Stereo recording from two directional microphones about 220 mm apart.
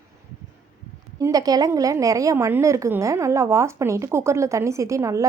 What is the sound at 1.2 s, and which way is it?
A woman's voice, 15° right (ahead or behind).